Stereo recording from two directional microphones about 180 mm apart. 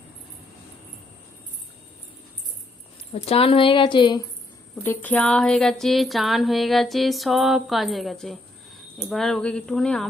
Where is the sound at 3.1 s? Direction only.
30° left (ahead or behind).